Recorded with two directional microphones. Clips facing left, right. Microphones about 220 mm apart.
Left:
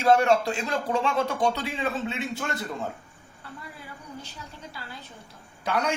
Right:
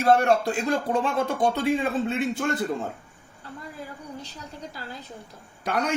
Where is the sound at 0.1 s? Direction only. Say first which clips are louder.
Even; 55° right (ahead or behind).